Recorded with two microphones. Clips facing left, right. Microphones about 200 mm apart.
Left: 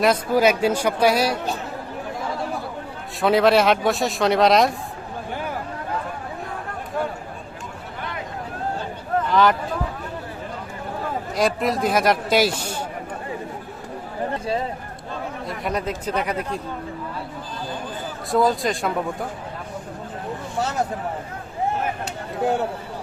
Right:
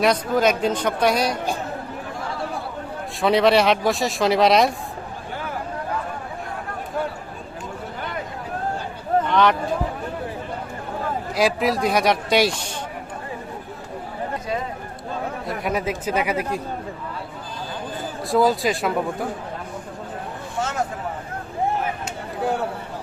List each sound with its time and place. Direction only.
0.0 s speech: 5° left (ahead or behind)
3.2 s speech: centre (ahead or behind)
9.3 s speech: centre (ahead or behind)
11.3 s speech: centre (ahead or behind)
15.4 s speech: 5° right (ahead or behind)
18.3 s speech: centre (ahead or behind)
20.6 s speech: 35° left (ahead or behind)